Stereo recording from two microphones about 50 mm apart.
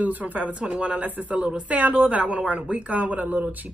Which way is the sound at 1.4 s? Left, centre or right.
Centre.